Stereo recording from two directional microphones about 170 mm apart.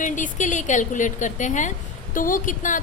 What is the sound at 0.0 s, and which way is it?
A woman's voice, 50° left (ahead or behind).